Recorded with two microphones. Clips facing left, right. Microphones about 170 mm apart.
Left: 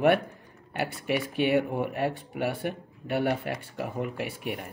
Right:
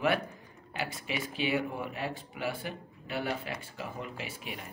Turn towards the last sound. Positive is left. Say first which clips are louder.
# left 8 dB
turn(degrees=60)  # may be behind; listen again after turning